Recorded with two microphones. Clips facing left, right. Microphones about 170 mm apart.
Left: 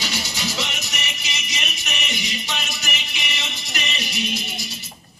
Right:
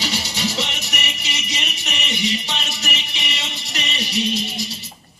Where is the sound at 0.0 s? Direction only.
30° right (ahead or behind).